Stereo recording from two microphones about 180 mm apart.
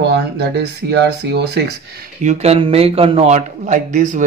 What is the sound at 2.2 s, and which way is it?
Speech, 35° right (ahead or behind).